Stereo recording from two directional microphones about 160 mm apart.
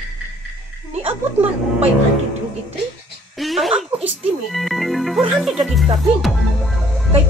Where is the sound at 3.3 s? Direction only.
Centre (ahead or behind).